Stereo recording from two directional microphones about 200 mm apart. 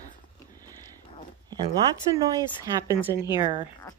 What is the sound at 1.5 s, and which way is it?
Speech, 15° right (ahead or behind).